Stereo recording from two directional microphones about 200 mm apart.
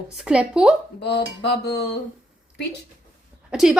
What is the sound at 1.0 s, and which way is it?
Speech, 55° left (ahead or behind).